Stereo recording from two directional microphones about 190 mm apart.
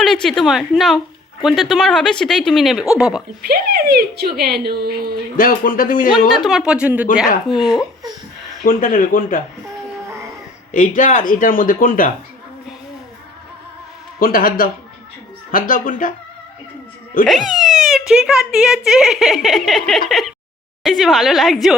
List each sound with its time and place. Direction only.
0.0 s a woman's voice: centre (ahead or behind)
3.4 s speech: 55° right (ahead or behind)
5.4 s speech: 45° left (ahead or behind)
6.1 s speech: 25° left (ahead or behind)
6.4 s a woman's voice: centre (ahead or behind)
8.6 s speech: 45° left (ahead or behind)
10.7 s speech: 45° left (ahead or behind)
14.2 s speech: 50° left (ahead or behind)
17.1 s speech: 45° left (ahead or behind)
17.5 s a child's voice: centre (ahead or behind)